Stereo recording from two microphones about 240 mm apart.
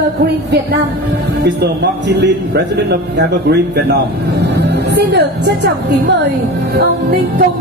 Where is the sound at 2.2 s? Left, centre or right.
Right.